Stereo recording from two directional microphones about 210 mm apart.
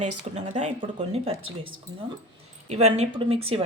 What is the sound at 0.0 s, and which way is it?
A woman's voice, 35° right (ahead or behind).